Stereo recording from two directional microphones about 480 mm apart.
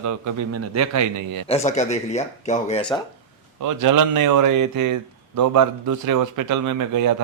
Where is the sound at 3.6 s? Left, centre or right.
Right.